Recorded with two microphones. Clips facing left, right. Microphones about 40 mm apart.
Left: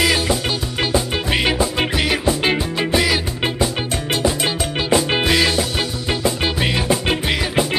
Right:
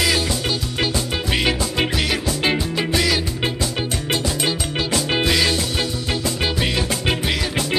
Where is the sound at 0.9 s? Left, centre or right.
Centre.